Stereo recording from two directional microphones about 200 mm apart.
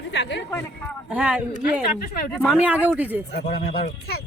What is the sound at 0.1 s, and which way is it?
Speech, 60° left (ahead or behind).